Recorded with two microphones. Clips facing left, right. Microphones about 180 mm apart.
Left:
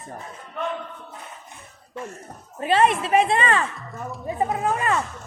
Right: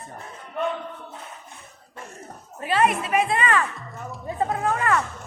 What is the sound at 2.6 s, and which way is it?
A woman's voice, 25° left (ahead or behind).